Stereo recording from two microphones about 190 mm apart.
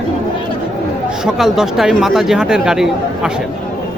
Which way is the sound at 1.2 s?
Centre (ahead or behind).